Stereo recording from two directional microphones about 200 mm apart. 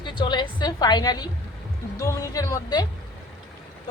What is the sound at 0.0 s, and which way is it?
A woman's voice, 25° left (ahead or behind).